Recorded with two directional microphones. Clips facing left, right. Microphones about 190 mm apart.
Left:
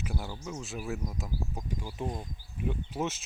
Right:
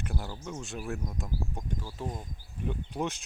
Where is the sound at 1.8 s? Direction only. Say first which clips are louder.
Left 2 dB; 15° left (ahead or behind).